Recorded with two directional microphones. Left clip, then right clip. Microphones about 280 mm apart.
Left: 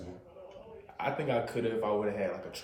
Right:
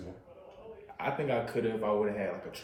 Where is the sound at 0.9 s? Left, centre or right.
Centre.